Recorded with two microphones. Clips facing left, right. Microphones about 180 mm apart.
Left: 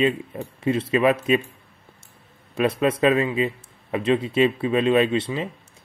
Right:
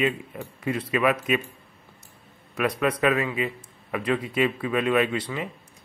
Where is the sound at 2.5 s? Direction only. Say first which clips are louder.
Left 4 dB; 25° left (ahead or behind).